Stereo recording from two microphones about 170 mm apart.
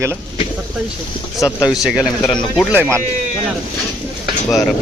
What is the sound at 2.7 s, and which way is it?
Speech, 10° right (ahead or behind).